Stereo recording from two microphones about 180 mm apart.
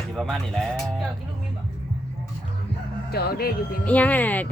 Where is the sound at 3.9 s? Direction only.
10° left (ahead or behind).